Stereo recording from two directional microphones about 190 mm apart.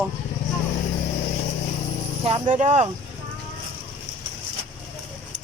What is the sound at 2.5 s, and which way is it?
Speech, 40° right (ahead or behind).